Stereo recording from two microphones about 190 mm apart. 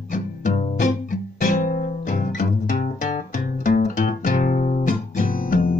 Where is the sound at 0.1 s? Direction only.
40° left (ahead or behind).